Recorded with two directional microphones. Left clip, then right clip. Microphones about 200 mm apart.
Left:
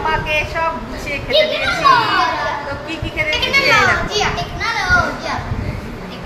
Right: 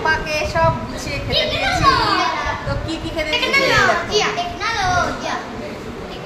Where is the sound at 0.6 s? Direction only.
15° right (ahead or behind).